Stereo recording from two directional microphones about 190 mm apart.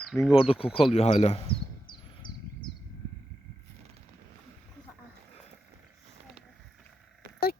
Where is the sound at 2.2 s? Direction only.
45° left (ahead or behind).